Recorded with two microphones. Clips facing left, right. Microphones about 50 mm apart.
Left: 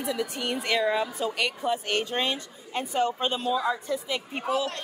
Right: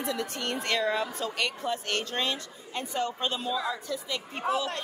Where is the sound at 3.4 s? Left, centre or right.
Centre.